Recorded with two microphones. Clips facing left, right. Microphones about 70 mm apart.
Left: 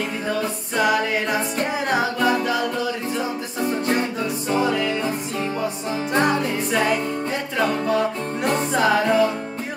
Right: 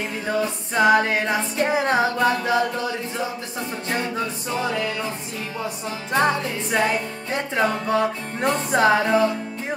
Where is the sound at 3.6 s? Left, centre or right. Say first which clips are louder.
Left 5 dB; left.